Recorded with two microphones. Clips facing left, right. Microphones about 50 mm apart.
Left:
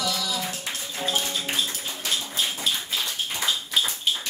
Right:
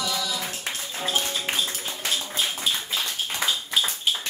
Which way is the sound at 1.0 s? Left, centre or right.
Right.